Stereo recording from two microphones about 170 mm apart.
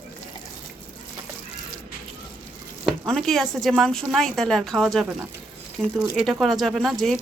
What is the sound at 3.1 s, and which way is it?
Speech, centre (ahead or behind).